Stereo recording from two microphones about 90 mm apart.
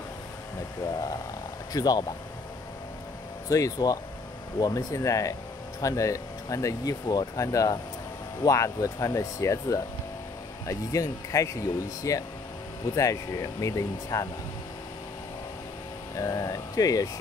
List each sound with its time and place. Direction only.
1.7 s speech: 45° left (ahead or behind)
3.4 s speech: 35° left (ahead or behind)
16.2 s speech: 40° left (ahead or behind)